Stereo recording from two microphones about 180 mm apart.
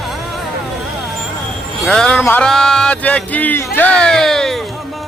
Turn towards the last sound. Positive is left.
turn(degrees=0)  # may be behind; listen again after turning